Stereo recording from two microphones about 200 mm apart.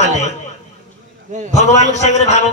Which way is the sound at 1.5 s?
35° left (ahead or behind).